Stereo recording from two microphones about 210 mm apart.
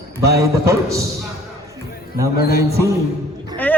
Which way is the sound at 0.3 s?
15° right (ahead or behind).